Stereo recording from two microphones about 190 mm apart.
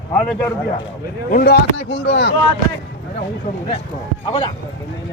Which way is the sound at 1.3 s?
55° left (ahead or behind).